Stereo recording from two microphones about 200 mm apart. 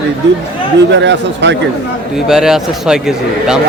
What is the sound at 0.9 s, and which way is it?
Speech, 60° right (ahead or behind).